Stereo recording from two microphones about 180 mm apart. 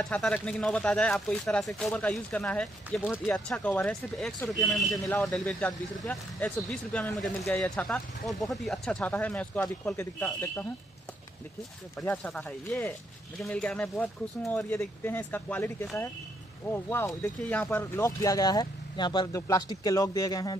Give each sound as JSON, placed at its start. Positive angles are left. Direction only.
{"t": 0.0, "sound": "speech", "side_deg": 5}
{"t": 12.0, "sound": "speech", "side_deg": 5}